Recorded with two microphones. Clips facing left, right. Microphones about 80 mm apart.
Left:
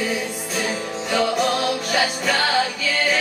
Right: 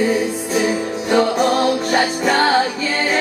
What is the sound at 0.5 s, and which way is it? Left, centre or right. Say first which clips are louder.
Music: right 7 dB; centre.